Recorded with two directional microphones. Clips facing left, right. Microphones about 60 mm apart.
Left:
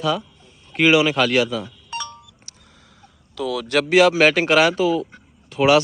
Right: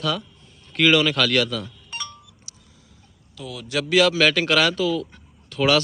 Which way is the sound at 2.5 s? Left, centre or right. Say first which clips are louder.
Left 1 dB; left.